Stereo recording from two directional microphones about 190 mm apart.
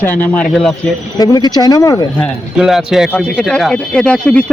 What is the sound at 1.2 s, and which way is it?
Speech, 20° left (ahead or behind).